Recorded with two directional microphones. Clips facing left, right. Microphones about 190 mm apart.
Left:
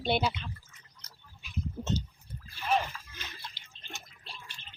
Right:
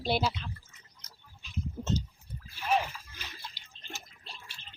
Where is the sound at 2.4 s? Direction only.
10° right (ahead or behind).